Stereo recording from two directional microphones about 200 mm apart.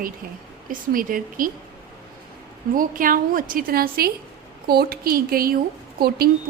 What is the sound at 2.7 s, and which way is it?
A woman's voice, 45° right (ahead or behind).